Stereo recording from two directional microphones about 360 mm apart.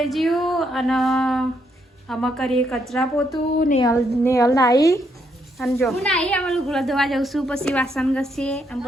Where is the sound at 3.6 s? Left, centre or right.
Left.